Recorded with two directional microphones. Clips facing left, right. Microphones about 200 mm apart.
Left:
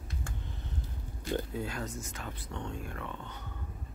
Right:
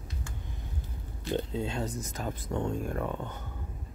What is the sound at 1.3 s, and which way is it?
Speech, 25° right (ahead or behind).